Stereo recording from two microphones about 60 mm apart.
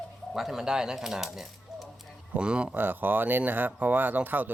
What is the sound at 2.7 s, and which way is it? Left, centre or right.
Speech, right.